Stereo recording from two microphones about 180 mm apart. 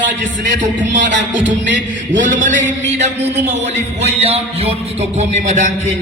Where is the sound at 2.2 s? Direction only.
45° right (ahead or behind).